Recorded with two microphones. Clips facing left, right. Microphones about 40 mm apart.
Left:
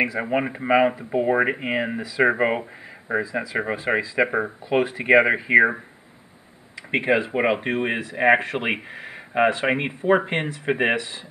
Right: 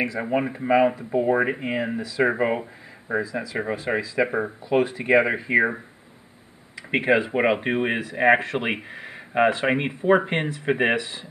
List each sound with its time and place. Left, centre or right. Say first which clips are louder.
0.0 s speech: left 1 dB; left
6.9 s speech: even; centre